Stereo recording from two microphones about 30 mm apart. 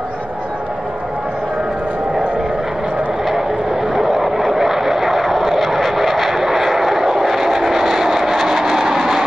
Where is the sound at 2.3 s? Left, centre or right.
Centre.